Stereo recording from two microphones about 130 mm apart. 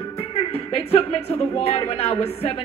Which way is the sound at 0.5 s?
50° left (ahead or behind).